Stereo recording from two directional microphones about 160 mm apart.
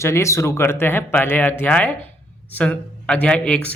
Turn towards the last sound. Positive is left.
turn(degrees=10)  # may be behind; listen again after turning